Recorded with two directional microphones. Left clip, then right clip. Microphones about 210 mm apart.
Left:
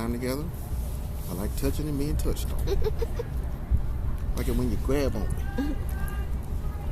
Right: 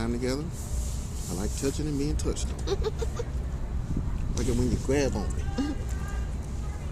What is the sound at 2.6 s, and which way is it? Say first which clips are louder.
Speech: even; 15° right (ahead or behind).